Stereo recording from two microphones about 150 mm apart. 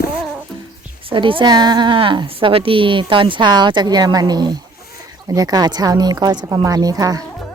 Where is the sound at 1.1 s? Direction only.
35° right (ahead or behind).